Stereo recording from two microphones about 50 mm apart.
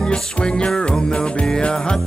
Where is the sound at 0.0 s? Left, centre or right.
Centre.